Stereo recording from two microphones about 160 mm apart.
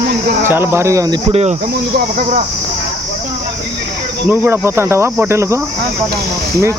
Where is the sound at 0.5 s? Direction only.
15° right (ahead or behind).